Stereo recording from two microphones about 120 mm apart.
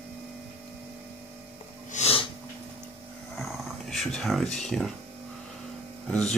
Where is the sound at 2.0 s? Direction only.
85° left.